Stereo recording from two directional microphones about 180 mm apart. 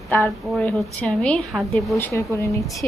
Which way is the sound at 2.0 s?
15° left (ahead or behind).